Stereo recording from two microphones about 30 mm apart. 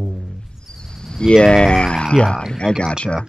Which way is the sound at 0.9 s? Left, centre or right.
Left.